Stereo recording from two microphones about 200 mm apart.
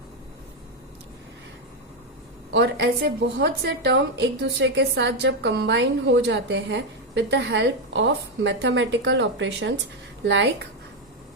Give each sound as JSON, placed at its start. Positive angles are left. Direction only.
{"t": 2.5, "sound": "a woman's voice", "side_deg": -60}